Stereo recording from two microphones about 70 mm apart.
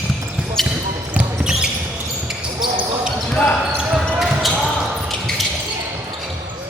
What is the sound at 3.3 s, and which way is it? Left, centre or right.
Basketball bounce, centre.